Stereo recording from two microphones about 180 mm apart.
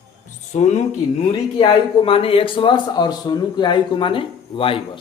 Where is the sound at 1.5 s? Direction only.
30° left (ahead or behind).